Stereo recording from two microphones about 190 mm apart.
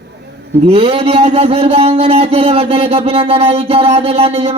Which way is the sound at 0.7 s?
30° right (ahead or behind).